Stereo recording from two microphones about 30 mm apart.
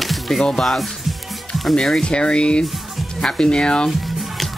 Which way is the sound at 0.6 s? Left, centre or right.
Centre.